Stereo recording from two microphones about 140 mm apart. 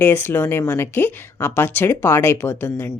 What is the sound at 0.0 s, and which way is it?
Speech, 15° left (ahead or behind).